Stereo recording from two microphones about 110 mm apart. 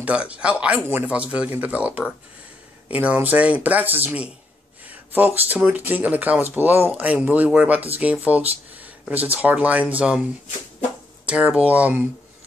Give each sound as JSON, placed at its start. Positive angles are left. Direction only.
{"t": 0.0, "sound": "speech", "side_deg": -10}
{"t": 11.2, "sound": "speech", "side_deg": -10}